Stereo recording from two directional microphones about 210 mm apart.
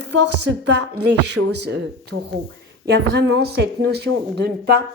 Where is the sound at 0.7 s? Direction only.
55° right (ahead or behind).